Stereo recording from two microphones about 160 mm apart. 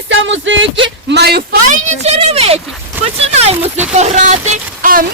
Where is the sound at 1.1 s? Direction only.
90° right.